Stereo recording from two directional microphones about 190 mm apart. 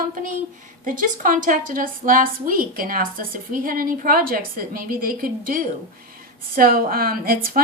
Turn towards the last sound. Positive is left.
turn(degrees=-50)  # may be behind; listen again after turning